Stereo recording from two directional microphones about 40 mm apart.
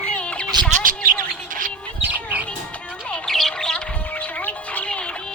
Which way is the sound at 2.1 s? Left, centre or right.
Right.